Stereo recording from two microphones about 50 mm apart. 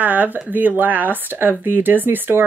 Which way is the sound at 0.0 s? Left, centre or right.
Right.